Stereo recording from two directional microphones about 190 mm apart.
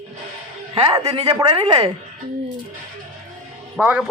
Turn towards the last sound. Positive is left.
turn(degrees=-5)  # may be behind; listen again after turning